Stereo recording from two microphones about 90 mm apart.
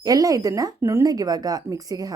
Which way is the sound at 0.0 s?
45° right (ahead or behind).